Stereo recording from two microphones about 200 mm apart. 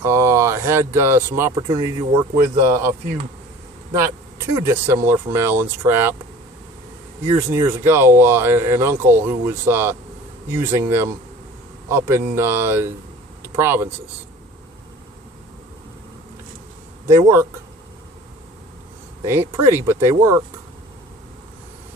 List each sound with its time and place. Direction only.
0.0 s speech: 15° right (ahead or behind)
3.9 s speech: 15° right (ahead or behind)
7.3 s speech: 10° right (ahead or behind)
17.1 s speech: 15° right (ahead or behind)
19.2 s speech: 15° right (ahead or behind)